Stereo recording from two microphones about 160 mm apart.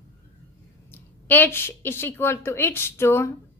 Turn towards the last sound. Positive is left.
turn(degrees=15)  # may be behind; listen again after turning